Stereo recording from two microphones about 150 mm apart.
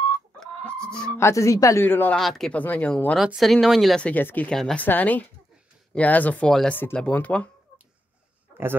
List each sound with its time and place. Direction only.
0.4 s chicken: 5° left (ahead or behind)
1.1 s speech: 20° left (ahead or behind)
2.1 s speech: centre (ahead or behind)